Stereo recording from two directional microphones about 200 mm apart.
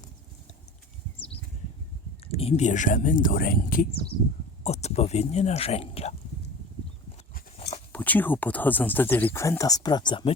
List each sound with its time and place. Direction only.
2.2 s speech: 30° left (ahead or behind); by 3.8 s 45° left (ahead or behind)
4.6 s speech: 35° left (ahead or behind)
7.9 s speech: 10° left (ahead or behind)